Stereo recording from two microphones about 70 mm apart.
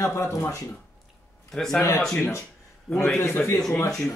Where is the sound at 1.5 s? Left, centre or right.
Centre.